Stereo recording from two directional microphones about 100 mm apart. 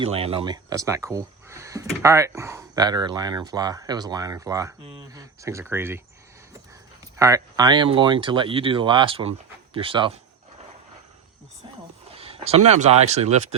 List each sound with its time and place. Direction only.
0.0 s speech: 75° right (ahead or behind)
0.4 s speech: 40° right (ahead or behind)
2.7 s speech: 45° right (ahead or behind); by 6.0 s 25° right (ahead or behind)
7.2 s speech: 30° right (ahead or behind)
7.9 s speech: 55° right (ahead or behind)
12.1 s speech: 75° right (ahead or behind)